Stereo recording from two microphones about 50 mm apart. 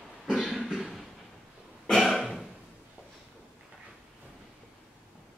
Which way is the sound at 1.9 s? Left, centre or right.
Centre.